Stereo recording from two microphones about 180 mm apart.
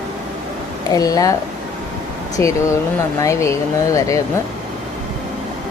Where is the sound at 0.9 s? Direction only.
20° left (ahead or behind).